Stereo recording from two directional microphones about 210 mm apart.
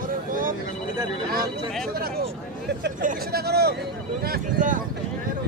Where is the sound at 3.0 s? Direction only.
50° right (ahead or behind).